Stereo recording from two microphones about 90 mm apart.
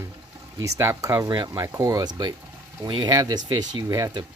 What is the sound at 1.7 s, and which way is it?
Speech, 40° right (ahead or behind).